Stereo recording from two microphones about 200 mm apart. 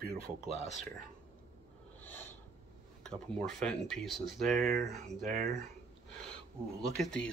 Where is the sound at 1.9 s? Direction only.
10° left (ahead or behind).